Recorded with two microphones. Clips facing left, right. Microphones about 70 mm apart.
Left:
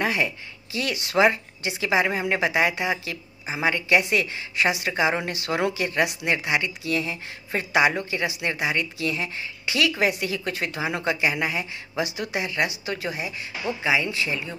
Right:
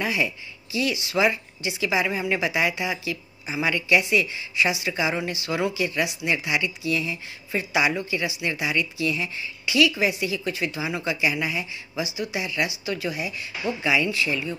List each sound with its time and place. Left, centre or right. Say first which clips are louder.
0.0 s speech: left 1 dB; left